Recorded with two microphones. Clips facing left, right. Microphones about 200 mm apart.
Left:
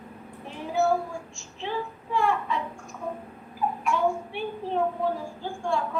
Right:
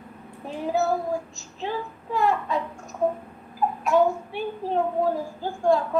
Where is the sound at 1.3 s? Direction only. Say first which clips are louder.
Right 1 dB; 40° right (ahead or behind).